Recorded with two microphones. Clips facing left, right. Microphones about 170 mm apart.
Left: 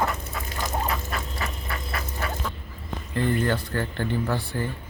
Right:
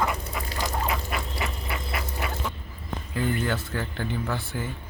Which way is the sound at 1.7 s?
20° right (ahead or behind).